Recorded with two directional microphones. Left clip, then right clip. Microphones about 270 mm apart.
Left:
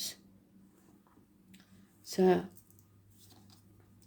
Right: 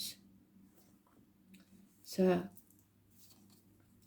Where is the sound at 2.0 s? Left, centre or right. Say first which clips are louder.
Left 5 dB; left.